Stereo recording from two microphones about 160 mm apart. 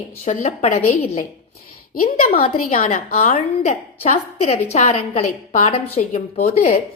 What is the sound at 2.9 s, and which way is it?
A woman's voice, 60° left (ahead or behind).